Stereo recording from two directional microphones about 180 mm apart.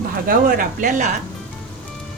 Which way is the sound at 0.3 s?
50° right (ahead or behind).